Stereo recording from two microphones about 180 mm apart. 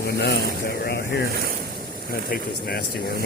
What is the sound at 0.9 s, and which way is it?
Speech, 65° left (ahead or behind).